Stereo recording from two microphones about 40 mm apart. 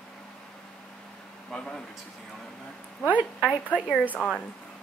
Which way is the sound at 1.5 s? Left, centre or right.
Left.